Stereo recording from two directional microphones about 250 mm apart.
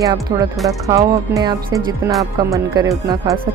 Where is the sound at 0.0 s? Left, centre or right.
Centre.